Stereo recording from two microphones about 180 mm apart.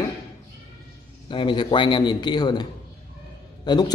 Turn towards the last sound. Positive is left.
turn(degrees=20)  # may be behind; listen again after turning